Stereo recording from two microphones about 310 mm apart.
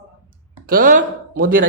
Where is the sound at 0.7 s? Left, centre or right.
Right.